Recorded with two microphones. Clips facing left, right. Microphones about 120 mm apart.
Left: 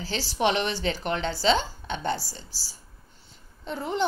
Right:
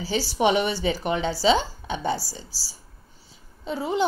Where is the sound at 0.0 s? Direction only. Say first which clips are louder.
Right 3 dB; 10° right (ahead or behind).